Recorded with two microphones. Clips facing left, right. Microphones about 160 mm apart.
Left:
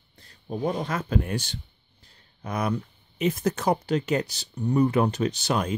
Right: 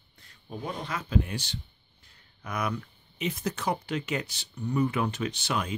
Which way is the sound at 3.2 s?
45° left (ahead or behind).